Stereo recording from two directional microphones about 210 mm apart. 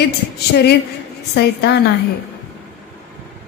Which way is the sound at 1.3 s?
50° left (ahead or behind).